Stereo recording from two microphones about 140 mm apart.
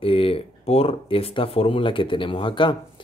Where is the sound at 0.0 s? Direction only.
40° left (ahead or behind).